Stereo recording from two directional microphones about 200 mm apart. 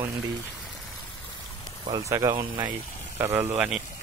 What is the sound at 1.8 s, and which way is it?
Speech, 15° right (ahead or behind).